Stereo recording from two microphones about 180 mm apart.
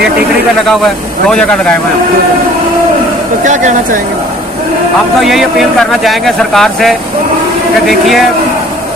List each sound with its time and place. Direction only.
3.4 s speech: 40° right (ahead or behind)
5.2 s speech: centre (ahead or behind)